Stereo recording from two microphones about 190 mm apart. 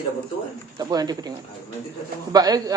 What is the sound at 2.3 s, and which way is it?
Speech, 20° right (ahead or behind).